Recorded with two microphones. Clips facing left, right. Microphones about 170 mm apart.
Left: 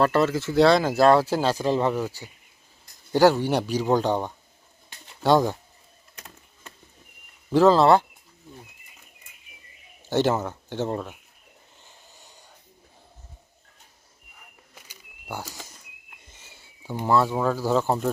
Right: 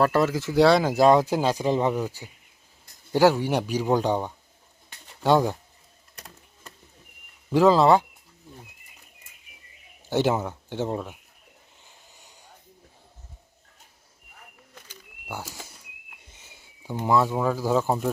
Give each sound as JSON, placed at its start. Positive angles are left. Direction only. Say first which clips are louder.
{"t": 0.0, "sound": "speech", "louder": "left 1 dB", "side_deg": -10}
{"t": 3.1, "sound": "speech", "louder": "left 1 dB", "side_deg": -5}
{"t": 7.5, "sound": "speech", "louder": "left 1 dB", "side_deg": -10}
{"t": 10.1, "sound": "speech", "louder": "left 1 dB", "side_deg": -10}
{"t": 15.3, "sound": "a sound", "louder": "left 1 dB", "side_deg": -5}
{"t": 17.1, "sound": "speech", "louder": "left 1 dB", "side_deg": -15}